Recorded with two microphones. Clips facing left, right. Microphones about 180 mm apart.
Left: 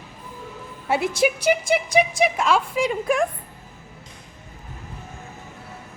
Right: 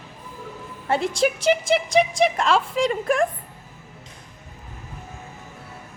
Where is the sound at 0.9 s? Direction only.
5° left (ahead or behind).